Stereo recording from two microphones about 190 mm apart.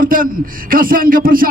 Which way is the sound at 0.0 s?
45° right (ahead or behind).